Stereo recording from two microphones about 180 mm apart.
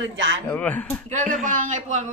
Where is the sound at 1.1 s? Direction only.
45° right (ahead or behind).